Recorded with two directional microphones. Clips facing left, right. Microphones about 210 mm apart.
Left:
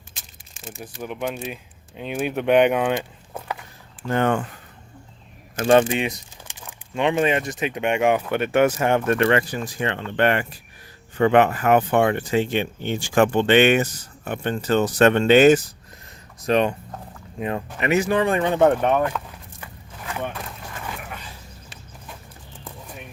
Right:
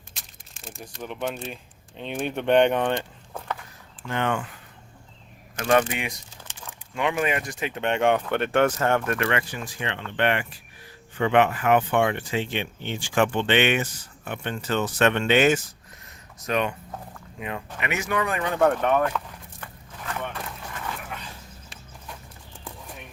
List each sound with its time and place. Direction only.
0.1 s speech: centre (ahead or behind)
4.0 s speech: 40° left (ahead or behind)
5.5 s speech: 30° left (ahead or behind)
5.9 s a sound: 25° left (ahead or behind)
7.0 s speech: 25° left (ahead or behind)
9.1 s speech: 35° left (ahead or behind)
17.7 s speech: 35° left (ahead or behind); by 19.1 s 15° left (ahead or behind)